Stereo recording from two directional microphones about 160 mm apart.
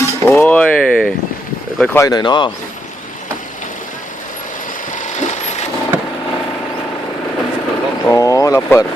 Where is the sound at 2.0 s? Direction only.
25° left (ahead or behind).